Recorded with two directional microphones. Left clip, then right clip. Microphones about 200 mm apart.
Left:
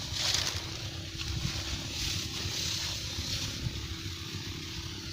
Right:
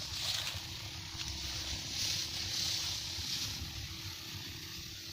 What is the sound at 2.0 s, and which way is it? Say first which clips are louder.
Vehicle: left 1 dB; 15° right (ahead or behind).